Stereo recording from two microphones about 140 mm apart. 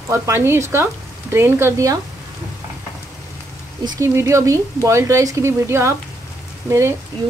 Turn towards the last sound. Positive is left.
turn(degrees=-20)  # may be behind; listen again after turning